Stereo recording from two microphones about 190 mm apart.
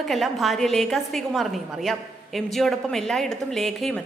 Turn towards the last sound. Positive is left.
turn(degrees=0)  # may be behind; listen again after turning